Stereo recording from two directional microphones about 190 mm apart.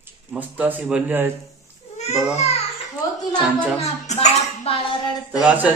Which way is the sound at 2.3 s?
35° left (ahead or behind).